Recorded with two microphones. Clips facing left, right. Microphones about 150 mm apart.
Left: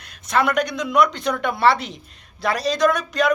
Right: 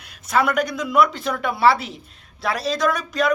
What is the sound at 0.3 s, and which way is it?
A woman's voice, 5° right (ahead or behind).